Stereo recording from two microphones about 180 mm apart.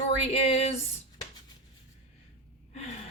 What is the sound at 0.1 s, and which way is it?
Speech, 35° left (ahead or behind).